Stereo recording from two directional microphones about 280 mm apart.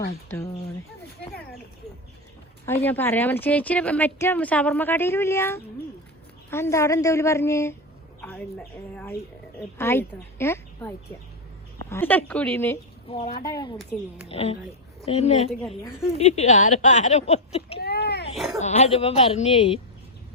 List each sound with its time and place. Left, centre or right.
2.6 s speech: centre
13.1 s a woman's voice: centre
17.7 s a sound: left
18.6 s speech: left